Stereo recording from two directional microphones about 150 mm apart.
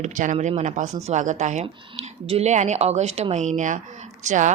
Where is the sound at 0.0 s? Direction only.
55° right (ahead or behind).